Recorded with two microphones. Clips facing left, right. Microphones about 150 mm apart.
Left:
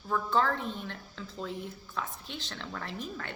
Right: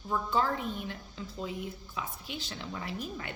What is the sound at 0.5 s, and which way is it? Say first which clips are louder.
A woman's voice: right 1 dB; 10° right (ahead or behind).